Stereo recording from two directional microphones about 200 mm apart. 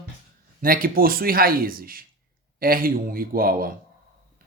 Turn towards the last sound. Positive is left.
turn(degrees=-45)  # may be behind; listen again after turning